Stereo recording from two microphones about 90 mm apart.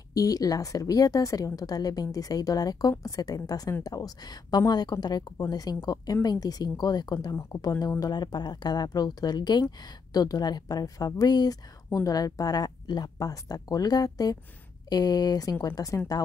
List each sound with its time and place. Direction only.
0.1 s speech: 45° left (ahead or behind)